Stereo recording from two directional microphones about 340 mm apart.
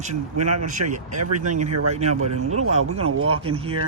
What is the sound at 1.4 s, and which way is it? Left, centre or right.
Speech, right.